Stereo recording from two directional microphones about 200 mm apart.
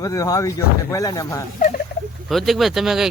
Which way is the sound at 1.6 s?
40° left (ahead or behind).